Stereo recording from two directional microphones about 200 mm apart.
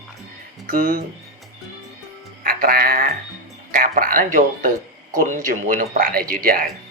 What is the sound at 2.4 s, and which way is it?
Speech, 45° right (ahead or behind).